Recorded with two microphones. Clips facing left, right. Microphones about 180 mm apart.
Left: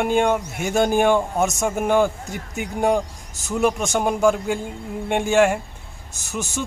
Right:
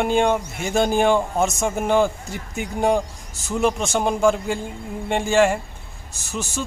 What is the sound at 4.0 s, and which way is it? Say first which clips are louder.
Speech: even; 5° left (ahead or behind).